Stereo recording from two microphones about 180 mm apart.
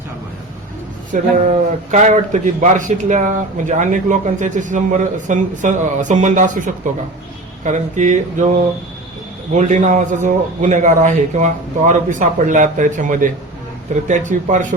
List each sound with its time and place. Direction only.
1.1 s a man's voice: 40° right (ahead or behind)